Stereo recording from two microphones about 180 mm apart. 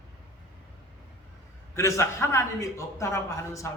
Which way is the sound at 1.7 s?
15° left (ahead or behind).